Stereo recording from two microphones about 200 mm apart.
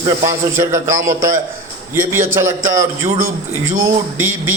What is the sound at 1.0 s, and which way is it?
Speech, 40° right (ahead or behind).